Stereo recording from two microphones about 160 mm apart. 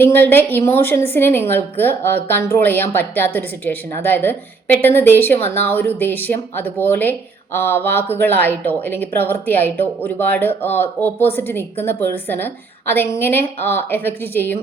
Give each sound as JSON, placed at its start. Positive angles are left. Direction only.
{"t": 0.0, "sound": "a woman's voice", "side_deg": 15}